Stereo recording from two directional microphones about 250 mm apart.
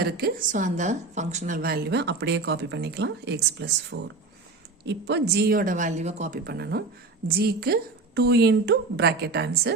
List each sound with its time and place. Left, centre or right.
0.0 s a woman's voice: right